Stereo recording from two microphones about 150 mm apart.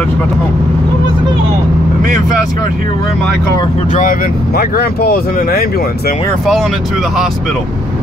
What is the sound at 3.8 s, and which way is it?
Speech, 60° left (ahead or behind).